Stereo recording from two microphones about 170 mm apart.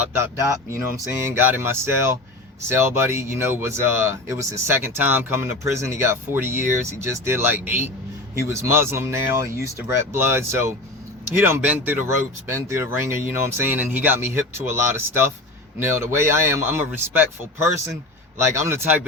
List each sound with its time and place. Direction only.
0.2 s speech: 15° right (ahead or behind)
18.3 s speech: 15° right (ahead or behind)